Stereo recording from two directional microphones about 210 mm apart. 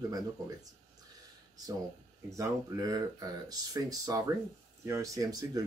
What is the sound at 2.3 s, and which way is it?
Speech, 15° right (ahead or behind).